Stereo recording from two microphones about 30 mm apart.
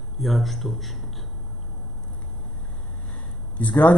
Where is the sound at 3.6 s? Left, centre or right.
Left.